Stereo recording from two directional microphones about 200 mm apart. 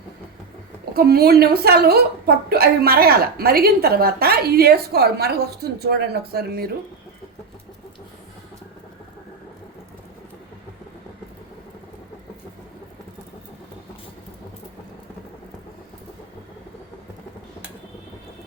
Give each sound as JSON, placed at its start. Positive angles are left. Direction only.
{"t": 0.9, "sound": "a woman's voice", "side_deg": -50}